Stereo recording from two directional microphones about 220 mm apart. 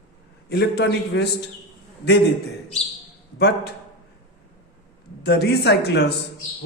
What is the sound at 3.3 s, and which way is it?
Speech, 45° left (ahead or behind).